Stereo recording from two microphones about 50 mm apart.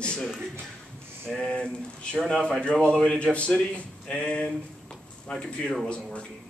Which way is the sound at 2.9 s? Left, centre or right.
Centre.